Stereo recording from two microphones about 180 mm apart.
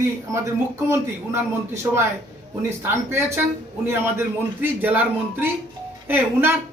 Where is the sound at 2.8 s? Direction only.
15° right (ahead or behind).